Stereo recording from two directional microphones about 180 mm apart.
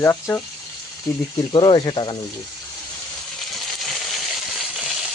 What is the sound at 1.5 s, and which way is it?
Speech, 25° left (ahead or behind).